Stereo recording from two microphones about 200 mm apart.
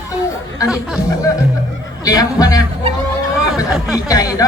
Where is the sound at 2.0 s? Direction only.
20° left (ahead or behind).